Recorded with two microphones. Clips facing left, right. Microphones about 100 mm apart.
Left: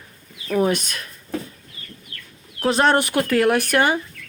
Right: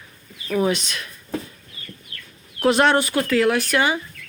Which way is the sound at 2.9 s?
60° left (ahead or behind).